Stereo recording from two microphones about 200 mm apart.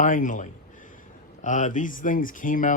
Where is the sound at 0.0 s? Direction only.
40° left (ahead or behind).